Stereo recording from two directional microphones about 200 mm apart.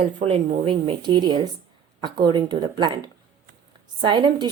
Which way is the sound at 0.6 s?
25° right (ahead or behind).